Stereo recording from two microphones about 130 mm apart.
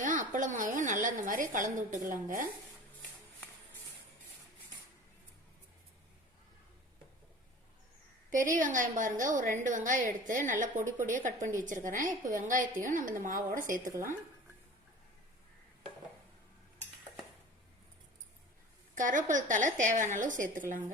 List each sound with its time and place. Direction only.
0.0 s a woman's voice: 90° right
8.3 s a woman's voice: 90° right
13.9 s speech: 20° right (ahead or behind)
18.9 s a woman's voice: 80° right